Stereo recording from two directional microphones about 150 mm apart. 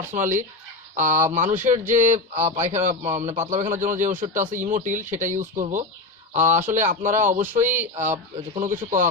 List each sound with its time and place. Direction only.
0.2 s a man's voice: 60° right (ahead or behind)